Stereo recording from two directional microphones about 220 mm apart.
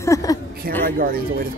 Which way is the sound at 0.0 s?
15° left (ahead or behind).